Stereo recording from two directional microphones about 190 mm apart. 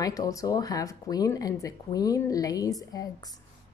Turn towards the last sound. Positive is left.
turn(degrees=20)  # may be behind; listen again after turning